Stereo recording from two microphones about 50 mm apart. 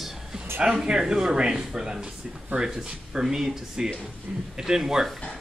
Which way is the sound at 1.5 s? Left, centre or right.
Centre.